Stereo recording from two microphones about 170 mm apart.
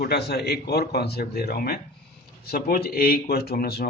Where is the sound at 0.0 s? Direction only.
70° left (ahead or behind).